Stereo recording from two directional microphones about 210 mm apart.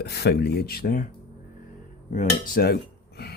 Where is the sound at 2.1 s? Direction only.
40° left (ahead or behind).